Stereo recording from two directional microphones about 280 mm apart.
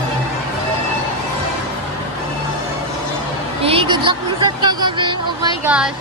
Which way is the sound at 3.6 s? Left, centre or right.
Centre.